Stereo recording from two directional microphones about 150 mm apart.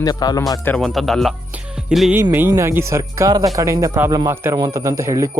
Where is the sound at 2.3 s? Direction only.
15° right (ahead or behind).